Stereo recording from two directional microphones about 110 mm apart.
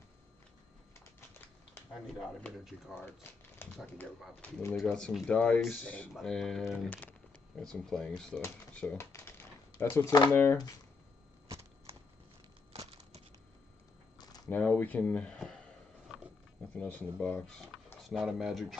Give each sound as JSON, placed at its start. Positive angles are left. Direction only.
{"t": 2.9, "sound": "speech", "side_deg": 20}
{"t": 4.7, "sound": "speech", "side_deg": 5}
{"t": 6.1, "sound": "speech", "side_deg": 5}
{"t": 6.9, "sound": "a sound", "side_deg": 15}
{"t": 7.5, "sound": "speech", "side_deg": 5}
{"t": 8.9, "sound": "typewriter", "side_deg": 20}
{"t": 10.3, "sound": "speech", "side_deg": 15}
{"t": 12.7, "sound": "a sound", "side_deg": -65}
{"t": 14.1, "sound": "a sound", "side_deg": 35}
{"t": 14.5, "sound": "speech", "side_deg": 15}
{"t": 15.3, "sound": "a sound", "side_deg": 5}
{"t": 16.7, "sound": "speech", "side_deg": 15}